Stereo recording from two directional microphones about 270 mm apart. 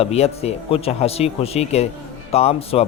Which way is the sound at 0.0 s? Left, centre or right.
Left.